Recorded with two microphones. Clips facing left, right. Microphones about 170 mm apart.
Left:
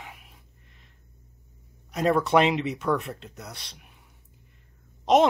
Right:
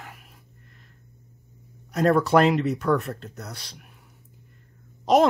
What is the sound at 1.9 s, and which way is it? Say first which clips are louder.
Speech: right 3 dB; centre (ahead or behind).